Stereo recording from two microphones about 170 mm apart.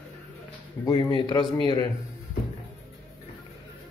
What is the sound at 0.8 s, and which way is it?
Speech, 10° left (ahead or behind).